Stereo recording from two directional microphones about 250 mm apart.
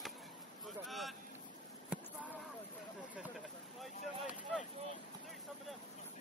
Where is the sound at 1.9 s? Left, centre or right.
Centre.